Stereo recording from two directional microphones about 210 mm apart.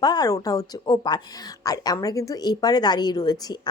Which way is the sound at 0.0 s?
20° left (ahead or behind).